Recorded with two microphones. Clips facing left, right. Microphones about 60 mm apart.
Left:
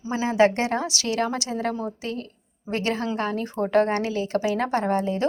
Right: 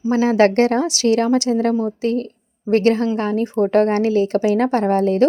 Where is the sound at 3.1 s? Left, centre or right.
Right.